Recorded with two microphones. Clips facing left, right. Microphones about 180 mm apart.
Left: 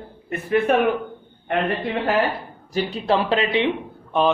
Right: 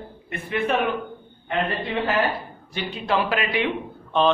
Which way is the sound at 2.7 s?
40° left (ahead or behind).